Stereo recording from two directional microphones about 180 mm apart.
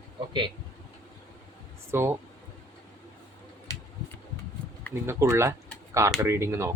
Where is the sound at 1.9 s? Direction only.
15° right (ahead or behind).